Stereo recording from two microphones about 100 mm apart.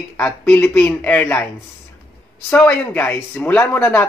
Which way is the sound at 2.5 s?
15° left (ahead or behind).